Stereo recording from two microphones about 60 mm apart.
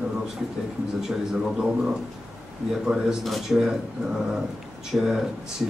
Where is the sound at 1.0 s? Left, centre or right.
Centre.